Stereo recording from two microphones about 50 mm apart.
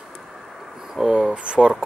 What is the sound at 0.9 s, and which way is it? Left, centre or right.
Speech, centre.